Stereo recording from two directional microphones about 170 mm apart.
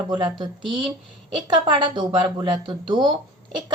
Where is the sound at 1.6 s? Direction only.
25° right (ahead or behind).